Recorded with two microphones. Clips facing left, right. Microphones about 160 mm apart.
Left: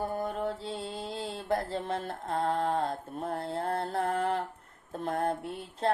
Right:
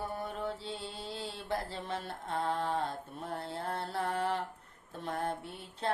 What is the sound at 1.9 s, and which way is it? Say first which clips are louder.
Mantra: left 5 dB; 40° left (ahead or behind).